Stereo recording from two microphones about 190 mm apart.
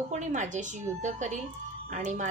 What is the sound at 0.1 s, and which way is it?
A woman's voice, 40° right (ahead or behind).